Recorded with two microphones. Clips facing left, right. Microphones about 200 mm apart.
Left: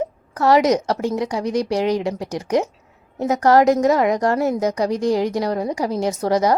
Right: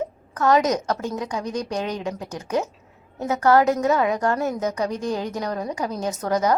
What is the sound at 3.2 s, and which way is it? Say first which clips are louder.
A woman's voice: left 3 dB; 35° left (ahead or behind).